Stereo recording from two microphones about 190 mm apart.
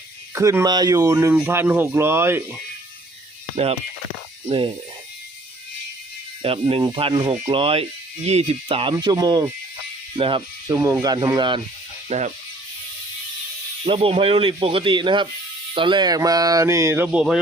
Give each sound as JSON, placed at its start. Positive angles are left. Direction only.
{"t": 0.3, "sound": "music", "side_deg": -15}
{"t": 4.4, "sound": "speech", "side_deg": -25}
{"t": 6.4, "sound": "speech", "side_deg": -30}
{"t": 12.0, "sound": "speech", "side_deg": -35}
{"t": 13.8, "sound": "speech", "side_deg": -30}
{"t": 15.7, "sound": "music", "side_deg": -25}